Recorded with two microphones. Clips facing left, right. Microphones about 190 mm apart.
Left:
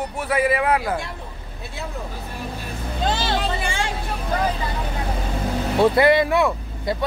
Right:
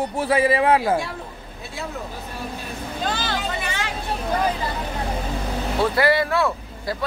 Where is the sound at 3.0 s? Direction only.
25° left (ahead or behind).